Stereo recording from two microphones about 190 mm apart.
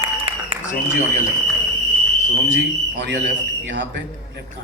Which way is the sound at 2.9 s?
65° right (ahead or behind).